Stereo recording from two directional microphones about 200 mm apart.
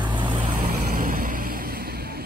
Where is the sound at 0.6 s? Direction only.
50° right (ahead or behind).